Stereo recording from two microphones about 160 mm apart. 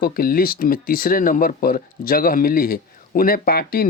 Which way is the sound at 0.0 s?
65° left (ahead or behind).